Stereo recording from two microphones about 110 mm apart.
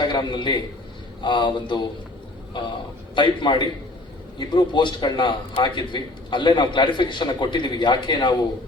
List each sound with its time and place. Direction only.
0.0 s a man's voice: 40° left (ahead or behind)
3.2 s a man's voice: 45° left (ahead or behind)